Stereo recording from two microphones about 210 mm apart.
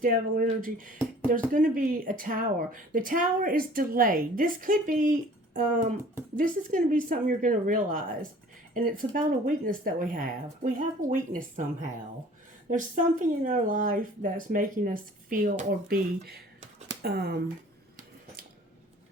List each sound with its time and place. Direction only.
0.0 s speech: 40° right (ahead or behind)